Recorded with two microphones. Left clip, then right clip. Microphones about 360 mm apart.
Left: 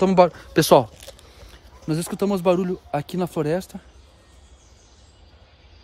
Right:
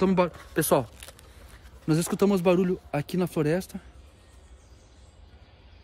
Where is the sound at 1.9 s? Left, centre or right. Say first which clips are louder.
Even; centre.